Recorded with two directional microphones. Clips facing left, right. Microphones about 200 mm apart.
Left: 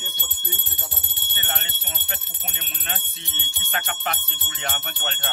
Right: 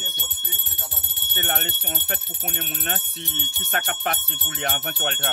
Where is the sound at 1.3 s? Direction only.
55° right (ahead or behind).